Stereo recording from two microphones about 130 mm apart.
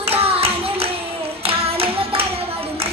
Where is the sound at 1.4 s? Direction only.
50° right (ahead or behind).